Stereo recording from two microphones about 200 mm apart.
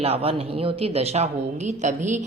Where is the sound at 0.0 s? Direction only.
30° right (ahead or behind).